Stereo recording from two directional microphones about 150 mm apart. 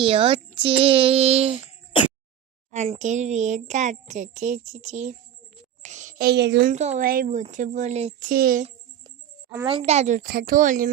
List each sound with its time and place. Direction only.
0.0 s a child's voice: 40° right (ahead or behind)
2.7 s a child's voice: 45° right (ahead or behind); by 6.7 s 90° right
6.7 s a child's voice: 50° right (ahead or behind)
7.0 s speech: 70° right (ahead or behind); by 8.3 s 50° right (ahead or behind)
8.3 s speech: 75° right (ahead or behind)
9.0 s music: 20° right (ahead or behind)
9.6 s a child's voice: 40° right (ahead or behind)
10.2 s speech: 75° right (ahead or behind)